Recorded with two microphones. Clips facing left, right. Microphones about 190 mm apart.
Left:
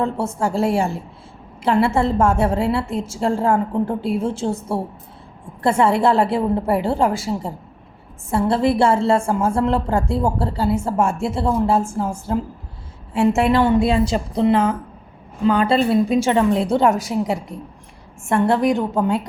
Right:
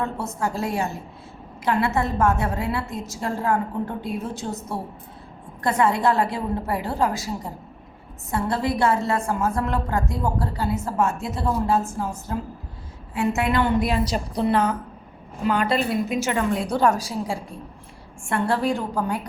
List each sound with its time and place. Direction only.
0.0 s a woman's voice: 30° left (ahead or behind)